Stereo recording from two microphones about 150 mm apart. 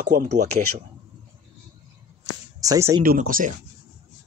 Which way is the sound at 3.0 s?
70° right (ahead or behind).